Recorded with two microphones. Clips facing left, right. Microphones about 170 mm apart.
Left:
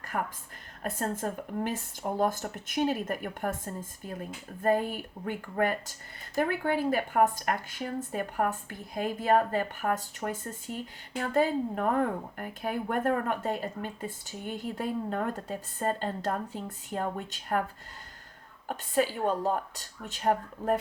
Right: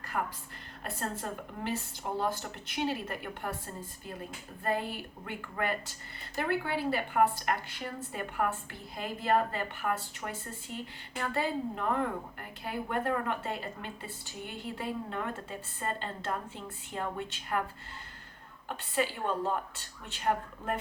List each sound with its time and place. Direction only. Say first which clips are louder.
0.1 s speech: left 2 dB; 45° left (ahead or behind)
18.7 s a woman's voice: left 4 dB; 45° left (ahead or behind)